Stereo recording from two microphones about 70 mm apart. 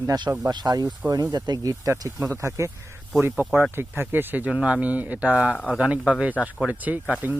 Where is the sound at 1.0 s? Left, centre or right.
Right.